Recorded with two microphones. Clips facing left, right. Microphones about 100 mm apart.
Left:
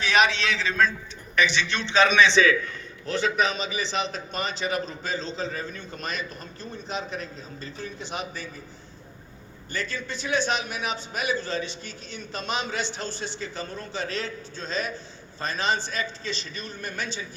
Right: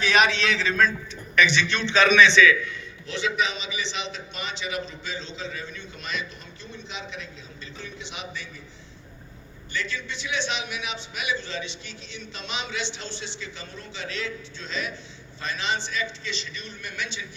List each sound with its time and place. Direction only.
0.0 s a man's voice: 30° left (ahead or behind)
9.7 s a man's voice: 45° left (ahead or behind)